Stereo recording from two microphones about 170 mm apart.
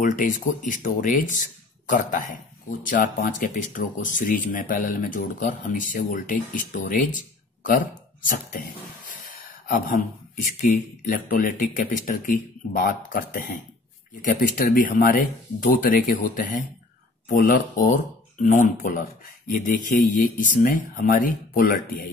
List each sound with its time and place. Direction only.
0.0 s speech: 50° left (ahead or behind)